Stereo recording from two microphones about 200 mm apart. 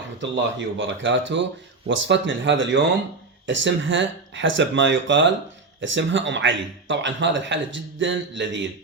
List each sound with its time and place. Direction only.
0.2 s speech: 65° right (ahead or behind)